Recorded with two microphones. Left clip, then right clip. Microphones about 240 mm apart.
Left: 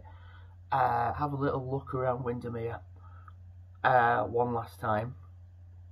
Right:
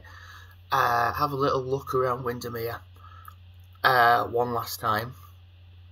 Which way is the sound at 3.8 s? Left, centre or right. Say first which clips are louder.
Right 5 dB; centre.